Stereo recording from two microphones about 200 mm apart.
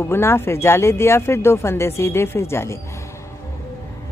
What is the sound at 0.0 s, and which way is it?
Speech, 10° left (ahead or behind).